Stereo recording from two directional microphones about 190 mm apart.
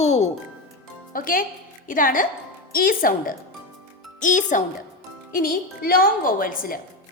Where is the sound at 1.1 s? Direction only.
45° left (ahead or behind).